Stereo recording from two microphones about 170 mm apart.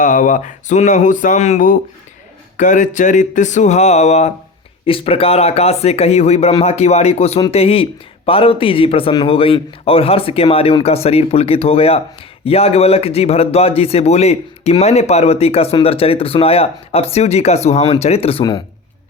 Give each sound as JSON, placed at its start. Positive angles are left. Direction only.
{"t": 0.0, "sound": "speech", "side_deg": 50}